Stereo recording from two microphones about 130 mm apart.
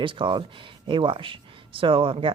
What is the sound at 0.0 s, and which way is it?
Speech, 40° right (ahead or behind).